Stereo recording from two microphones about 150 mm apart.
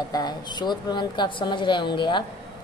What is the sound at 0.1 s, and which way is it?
A woman's voice, 30° left (ahead or behind).